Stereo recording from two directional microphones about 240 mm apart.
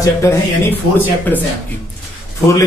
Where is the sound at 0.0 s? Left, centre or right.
Centre.